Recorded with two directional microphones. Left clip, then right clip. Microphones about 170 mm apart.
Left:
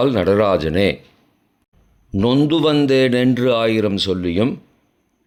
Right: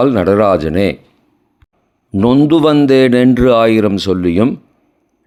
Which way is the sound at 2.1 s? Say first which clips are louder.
Right 6 dB; 25° right (ahead or behind).